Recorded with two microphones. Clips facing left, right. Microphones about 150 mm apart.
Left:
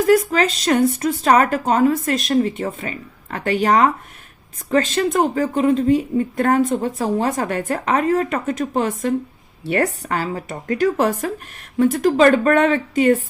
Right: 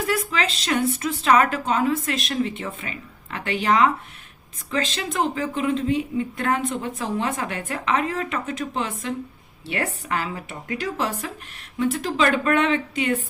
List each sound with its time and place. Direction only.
0.0 s speech: 45° left (ahead or behind)